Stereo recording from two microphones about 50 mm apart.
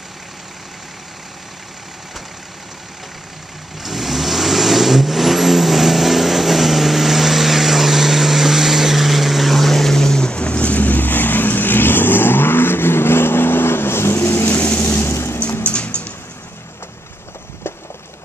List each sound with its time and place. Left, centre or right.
3.8 s vehicle: centre; by 14.5 s left
14.5 s vehicle: left
14.8 s vehicle: left
15.6 s bird: left